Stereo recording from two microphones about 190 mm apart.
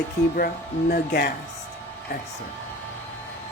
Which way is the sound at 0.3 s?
50° left (ahead or behind).